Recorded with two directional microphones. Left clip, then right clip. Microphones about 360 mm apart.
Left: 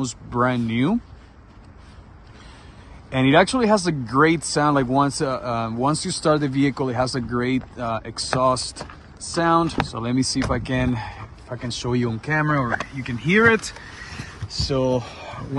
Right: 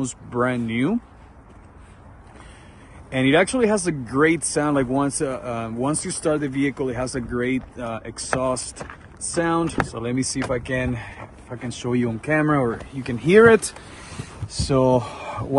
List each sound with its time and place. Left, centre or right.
0.0 s speech: centre
3.1 s speech: centre
14.7 s speech: centre